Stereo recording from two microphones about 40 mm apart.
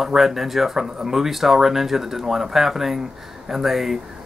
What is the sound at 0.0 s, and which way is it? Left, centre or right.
Speech, centre.